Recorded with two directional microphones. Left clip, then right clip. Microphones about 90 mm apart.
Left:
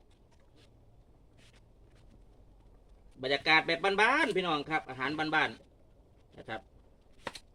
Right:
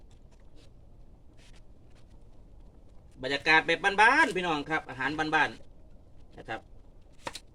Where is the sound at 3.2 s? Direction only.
20° right (ahead or behind).